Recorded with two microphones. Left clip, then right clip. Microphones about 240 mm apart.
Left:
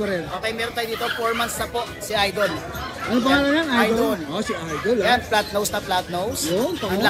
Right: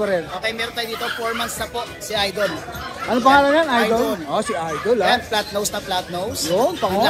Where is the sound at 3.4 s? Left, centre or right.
Centre.